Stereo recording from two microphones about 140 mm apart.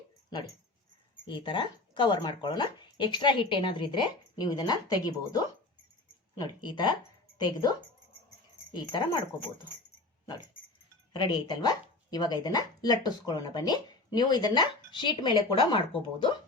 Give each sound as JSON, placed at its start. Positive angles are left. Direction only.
{"t": 1.3, "sound": "speech", "side_deg": 35}
{"t": 6.4, "sound": "speech", "side_deg": 30}
{"t": 11.1, "sound": "speech", "side_deg": 30}